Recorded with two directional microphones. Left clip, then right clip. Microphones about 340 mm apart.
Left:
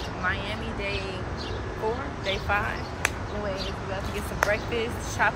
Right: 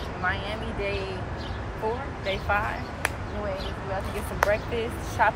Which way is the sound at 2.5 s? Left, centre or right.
Centre.